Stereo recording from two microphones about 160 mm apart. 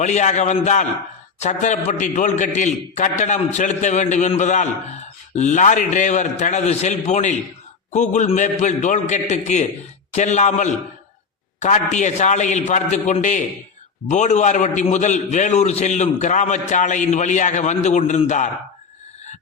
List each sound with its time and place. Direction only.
0.0 s a man's voice: 45° left (ahead or behind)